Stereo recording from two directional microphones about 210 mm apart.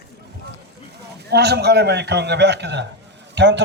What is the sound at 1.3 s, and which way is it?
A man's voice, 50° right (ahead or behind).